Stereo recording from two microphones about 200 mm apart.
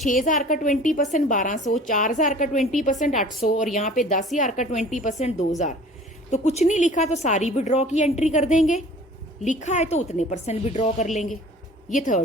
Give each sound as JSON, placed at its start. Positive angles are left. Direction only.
{"t": 0.1, "sound": "a woman's voice", "side_deg": 40}